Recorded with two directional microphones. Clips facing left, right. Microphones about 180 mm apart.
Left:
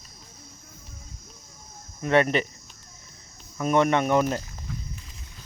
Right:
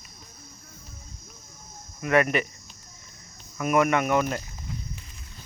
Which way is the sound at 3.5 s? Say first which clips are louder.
Left 1 dB; 30° left (ahead or behind).